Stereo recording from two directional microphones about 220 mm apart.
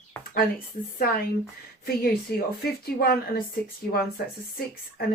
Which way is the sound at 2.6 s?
45° left (ahead or behind).